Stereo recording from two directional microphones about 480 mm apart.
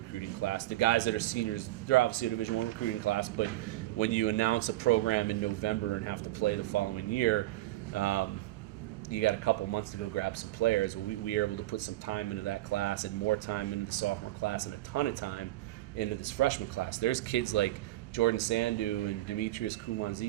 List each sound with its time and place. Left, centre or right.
0.4 s speech: left